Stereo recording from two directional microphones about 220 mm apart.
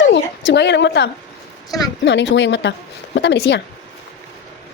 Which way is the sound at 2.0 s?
55° left (ahead or behind).